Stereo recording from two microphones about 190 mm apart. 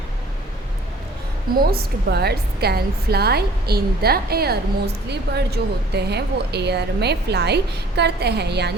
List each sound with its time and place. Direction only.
1.5 s a woman's voice: 55° right (ahead or behind)